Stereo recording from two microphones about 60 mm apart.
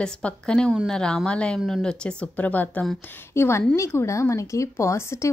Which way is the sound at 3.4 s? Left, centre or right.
Left.